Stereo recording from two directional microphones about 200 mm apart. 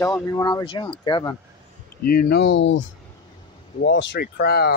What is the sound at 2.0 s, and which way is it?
Speech, 45° left (ahead or behind).